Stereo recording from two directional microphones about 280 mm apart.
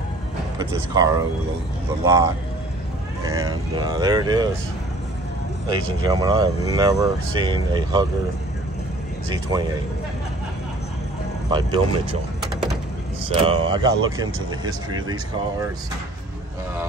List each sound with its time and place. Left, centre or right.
0.6 s speech: centre
5.7 s speech: centre
11.5 s speech: centre
13.3 s speech: centre